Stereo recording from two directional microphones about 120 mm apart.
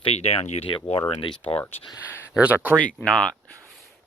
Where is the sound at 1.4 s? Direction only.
15° left (ahead or behind).